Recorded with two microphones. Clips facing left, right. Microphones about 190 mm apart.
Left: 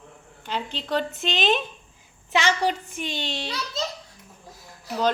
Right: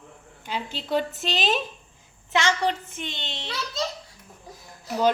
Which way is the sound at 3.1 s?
25° right (ahead or behind).